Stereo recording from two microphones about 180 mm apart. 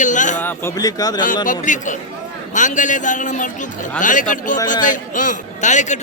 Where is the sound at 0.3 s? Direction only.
10° left (ahead or behind).